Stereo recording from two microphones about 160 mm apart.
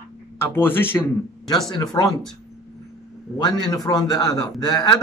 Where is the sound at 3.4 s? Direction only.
25° left (ahead or behind).